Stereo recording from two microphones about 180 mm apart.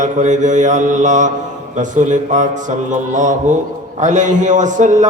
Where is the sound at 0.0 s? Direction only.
45° right (ahead or behind).